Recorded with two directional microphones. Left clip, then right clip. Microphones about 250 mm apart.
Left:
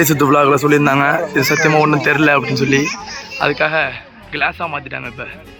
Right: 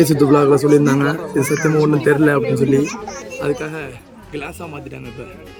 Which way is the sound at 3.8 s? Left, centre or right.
Centre.